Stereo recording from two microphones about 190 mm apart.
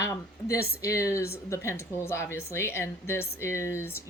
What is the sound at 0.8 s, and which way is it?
Speech, 15° left (ahead or behind).